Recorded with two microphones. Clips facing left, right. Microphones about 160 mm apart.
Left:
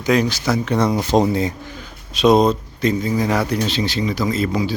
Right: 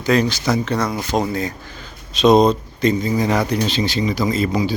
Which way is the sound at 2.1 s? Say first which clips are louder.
Right 1 dB; 5° left (ahead or behind).